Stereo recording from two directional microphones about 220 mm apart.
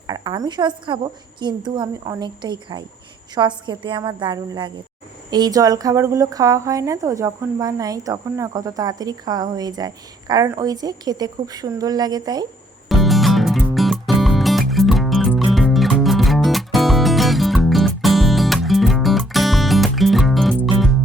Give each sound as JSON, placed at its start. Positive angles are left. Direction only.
{"t": 0.1, "sound": "a woman's voice", "side_deg": -20}
{"t": 12.9, "sound": "music", "side_deg": 0}